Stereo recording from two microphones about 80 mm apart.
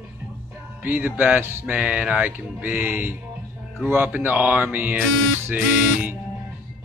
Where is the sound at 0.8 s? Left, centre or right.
Right.